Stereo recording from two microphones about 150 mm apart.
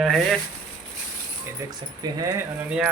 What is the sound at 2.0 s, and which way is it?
Speech, 25° right (ahead or behind).